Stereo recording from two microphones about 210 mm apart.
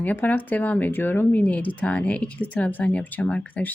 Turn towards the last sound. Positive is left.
turn(degrees=5)  # may be behind; listen again after turning